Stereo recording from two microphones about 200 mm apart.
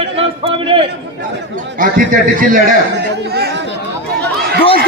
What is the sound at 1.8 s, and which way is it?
Speech, 40° right (ahead or behind).